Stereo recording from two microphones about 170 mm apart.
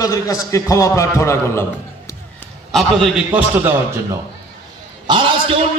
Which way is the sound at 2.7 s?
Centre (ahead or behind).